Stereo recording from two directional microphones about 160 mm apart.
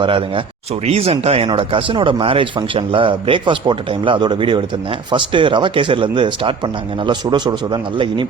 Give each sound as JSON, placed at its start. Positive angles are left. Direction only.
{"t": 0.0, "sound": "a man's voice", "side_deg": -35}